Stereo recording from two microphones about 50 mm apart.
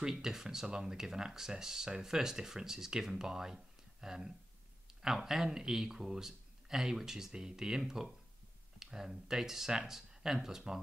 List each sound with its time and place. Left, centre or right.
0.0 s speech: centre